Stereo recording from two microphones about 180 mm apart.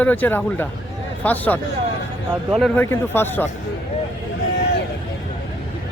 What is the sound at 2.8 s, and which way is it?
Speech, 10° left (ahead or behind).